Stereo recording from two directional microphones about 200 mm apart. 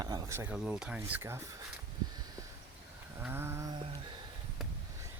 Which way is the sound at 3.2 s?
10° right (ahead or behind).